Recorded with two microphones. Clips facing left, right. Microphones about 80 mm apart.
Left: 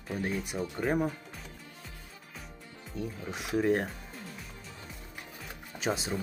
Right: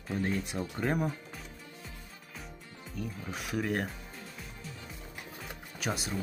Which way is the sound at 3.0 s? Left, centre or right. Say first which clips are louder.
Left 2 dB; centre.